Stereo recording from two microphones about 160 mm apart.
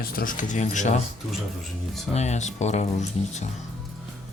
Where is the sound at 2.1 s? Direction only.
45° left (ahead or behind).